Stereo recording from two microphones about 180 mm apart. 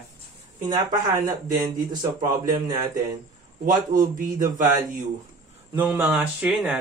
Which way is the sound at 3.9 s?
50° right (ahead or behind).